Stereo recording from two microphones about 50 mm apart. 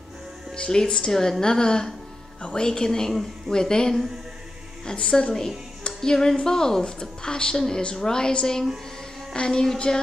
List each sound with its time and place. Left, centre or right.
0.6 s a woman's voice: centre